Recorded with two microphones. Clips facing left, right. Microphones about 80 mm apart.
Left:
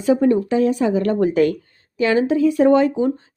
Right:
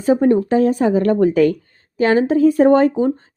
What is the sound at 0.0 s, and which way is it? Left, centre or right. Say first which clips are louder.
A woman's voice: right 2 dB; right.